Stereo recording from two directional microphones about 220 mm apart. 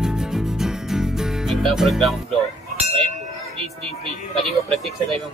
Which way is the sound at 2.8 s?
25° right (ahead or behind).